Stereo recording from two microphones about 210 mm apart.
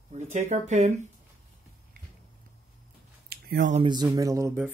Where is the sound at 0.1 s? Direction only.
35° right (ahead or behind).